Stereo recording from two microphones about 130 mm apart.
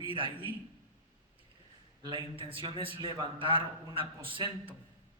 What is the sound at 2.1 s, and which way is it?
Speech, 40° right (ahead or behind).